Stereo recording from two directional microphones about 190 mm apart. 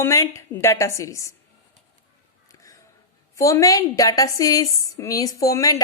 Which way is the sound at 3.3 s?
15° left (ahead or behind).